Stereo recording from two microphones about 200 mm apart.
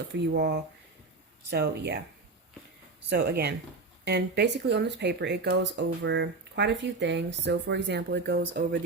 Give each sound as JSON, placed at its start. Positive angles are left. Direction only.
{"t": 0.2, "sound": "speech", "side_deg": -55}
{"t": 3.1, "sound": "speech", "side_deg": -50}